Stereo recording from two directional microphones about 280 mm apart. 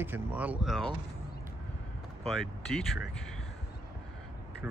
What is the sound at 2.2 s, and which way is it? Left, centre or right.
Speech, centre.